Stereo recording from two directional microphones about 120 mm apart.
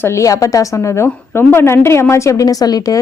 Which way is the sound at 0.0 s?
25° left (ahead or behind).